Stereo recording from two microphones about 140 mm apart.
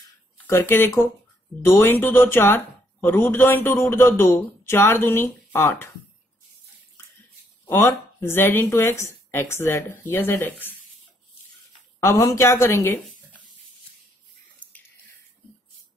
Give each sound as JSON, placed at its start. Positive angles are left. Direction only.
{"t": 0.5, "sound": "speech", "side_deg": 15}
{"t": 8.2, "sound": "speech", "side_deg": 15}
{"t": 12.0, "sound": "speech", "side_deg": 20}